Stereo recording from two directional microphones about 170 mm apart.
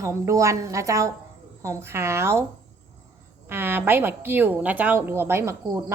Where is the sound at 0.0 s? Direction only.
15° right (ahead or behind).